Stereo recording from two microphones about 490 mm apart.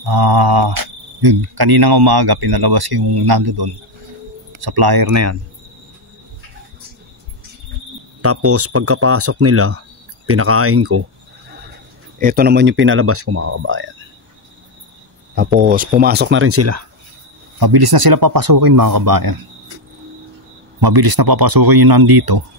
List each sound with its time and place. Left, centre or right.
0.0 s cricket: right
5.1 s speech: right
8.2 s speech: right
12.2 s speech: centre
15.6 s speech: centre
17.6 s cricket: right
20.8 s cricket: right